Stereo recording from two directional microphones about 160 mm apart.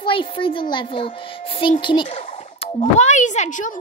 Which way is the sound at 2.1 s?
45° left (ahead or behind).